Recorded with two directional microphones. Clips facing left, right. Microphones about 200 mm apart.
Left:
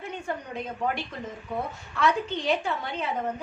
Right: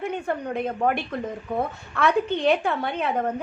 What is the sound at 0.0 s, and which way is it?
A woman's voice, 60° right (ahead or behind).